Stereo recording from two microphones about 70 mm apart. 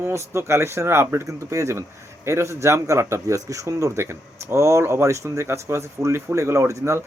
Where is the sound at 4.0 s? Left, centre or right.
Right.